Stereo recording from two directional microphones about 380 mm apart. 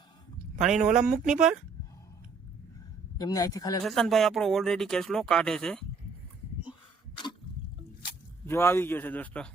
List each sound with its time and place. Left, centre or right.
0.6 s speech: centre
0.9 s speech: centre
1.1 s speech: centre
3.2 s speech: centre
8.4 s speech: centre